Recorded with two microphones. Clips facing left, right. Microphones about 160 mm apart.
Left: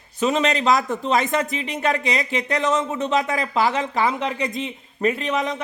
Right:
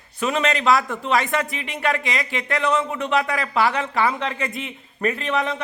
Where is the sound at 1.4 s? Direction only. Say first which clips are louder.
Left 4 dB; 35° left (ahead or behind).